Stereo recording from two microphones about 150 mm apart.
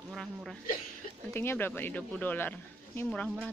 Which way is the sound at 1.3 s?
15° left (ahead or behind).